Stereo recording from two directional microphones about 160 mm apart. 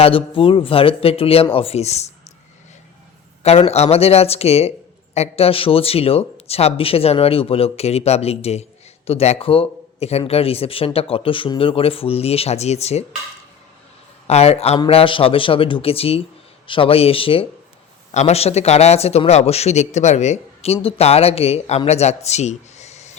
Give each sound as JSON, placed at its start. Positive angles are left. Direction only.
{"t": 0.0, "sound": "speech", "side_deg": 35}
{"t": 3.4, "sound": "speech", "side_deg": 40}
{"t": 14.3, "sound": "speech", "side_deg": 40}